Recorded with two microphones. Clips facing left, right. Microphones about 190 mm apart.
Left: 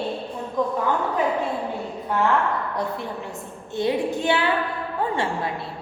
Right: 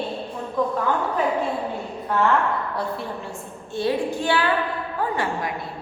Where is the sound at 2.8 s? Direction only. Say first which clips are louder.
Even; 20° left (ahead or behind).